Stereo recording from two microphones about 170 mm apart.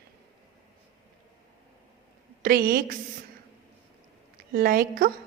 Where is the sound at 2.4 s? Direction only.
60° right (ahead or behind).